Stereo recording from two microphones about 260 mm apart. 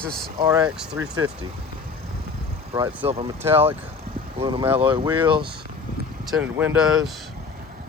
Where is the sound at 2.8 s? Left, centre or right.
Right.